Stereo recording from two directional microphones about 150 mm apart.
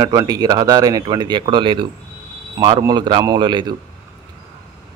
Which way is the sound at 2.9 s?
30° right (ahead or behind).